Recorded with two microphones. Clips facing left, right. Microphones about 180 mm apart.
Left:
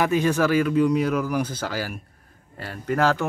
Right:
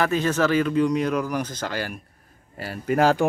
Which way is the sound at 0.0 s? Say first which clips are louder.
Left 1 dB; 15° left (ahead or behind).